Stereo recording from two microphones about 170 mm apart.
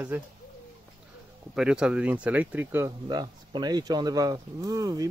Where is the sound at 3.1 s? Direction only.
25° right (ahead or behind).